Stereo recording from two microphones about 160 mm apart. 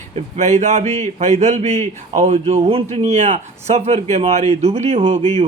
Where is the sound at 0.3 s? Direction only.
45° right (ahead or behind).